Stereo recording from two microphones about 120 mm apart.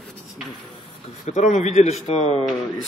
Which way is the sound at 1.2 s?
75° left (ahead or behind).